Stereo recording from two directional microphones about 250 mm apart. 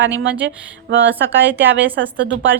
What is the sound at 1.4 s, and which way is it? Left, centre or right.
Speech, centre.